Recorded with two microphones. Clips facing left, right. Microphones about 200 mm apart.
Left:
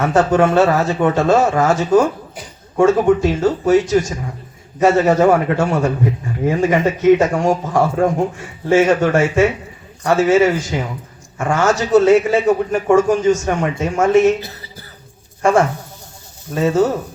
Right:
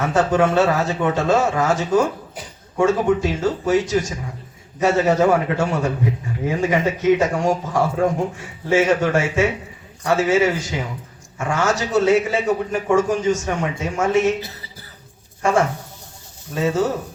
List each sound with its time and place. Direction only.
0.0 s a man's voice: 50° left (ahead or behind)
15.4 s a man's voice: 50° left (ahead or behind)